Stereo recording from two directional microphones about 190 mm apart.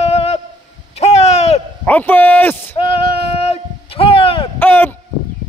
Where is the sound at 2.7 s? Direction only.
30° left (ahead or behind).